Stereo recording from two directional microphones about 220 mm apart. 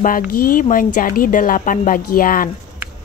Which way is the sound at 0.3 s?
40° left (ahead or behind).